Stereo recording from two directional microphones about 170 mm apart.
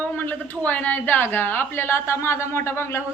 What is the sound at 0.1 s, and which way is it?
A woman's voice, 10° left (ahead or behind).